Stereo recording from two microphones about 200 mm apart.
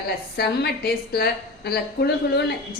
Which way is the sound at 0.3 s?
55° left (ahead or behind).